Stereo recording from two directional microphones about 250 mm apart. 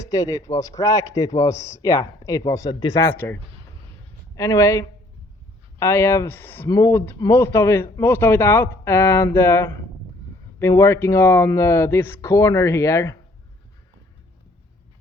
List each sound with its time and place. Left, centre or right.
0.0 s speech: centre